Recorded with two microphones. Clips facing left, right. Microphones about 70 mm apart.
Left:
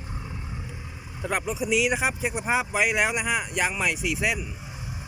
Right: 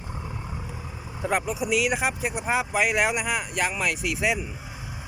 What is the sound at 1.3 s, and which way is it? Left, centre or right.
Speech, centre.